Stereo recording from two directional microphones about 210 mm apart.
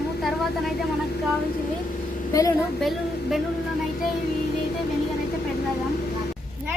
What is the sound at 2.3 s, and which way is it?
Speech, 15° left (ahead or behind).